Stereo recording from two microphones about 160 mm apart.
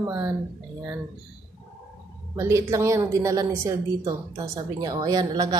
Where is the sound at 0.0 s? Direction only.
15° right (ahead or behind).